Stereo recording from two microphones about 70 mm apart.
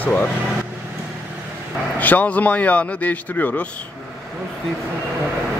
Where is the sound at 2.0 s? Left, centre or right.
Left.